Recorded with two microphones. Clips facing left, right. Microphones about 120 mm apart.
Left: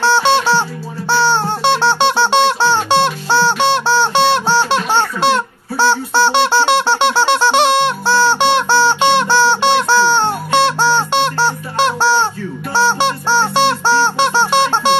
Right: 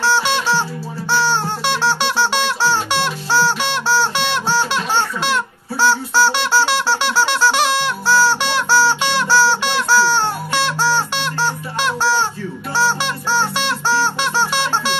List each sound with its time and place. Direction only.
0.0 s music: 30° left (ahead or behind)